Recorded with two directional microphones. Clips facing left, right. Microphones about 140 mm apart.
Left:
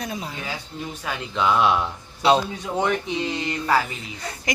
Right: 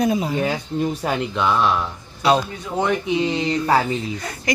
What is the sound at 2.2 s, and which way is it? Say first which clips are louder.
Speech: right 1 dB; 25° left (ahead or behind).